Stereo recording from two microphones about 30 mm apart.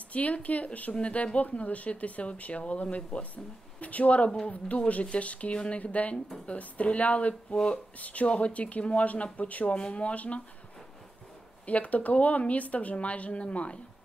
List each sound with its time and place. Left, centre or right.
0.1 s speech: left
8.3 s speech: left
11.6 s speech: left